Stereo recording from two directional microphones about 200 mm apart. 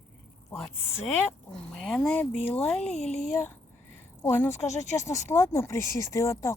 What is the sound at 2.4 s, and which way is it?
Speech, 30° left (ahead or behind).